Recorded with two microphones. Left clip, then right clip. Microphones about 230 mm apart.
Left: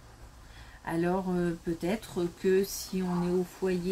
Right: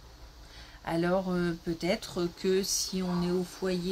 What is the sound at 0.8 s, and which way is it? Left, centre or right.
Speech, right.